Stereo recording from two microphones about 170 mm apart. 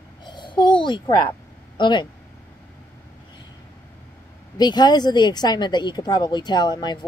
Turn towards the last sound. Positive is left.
turn(degrees=25)  # may be behind; listen again after turning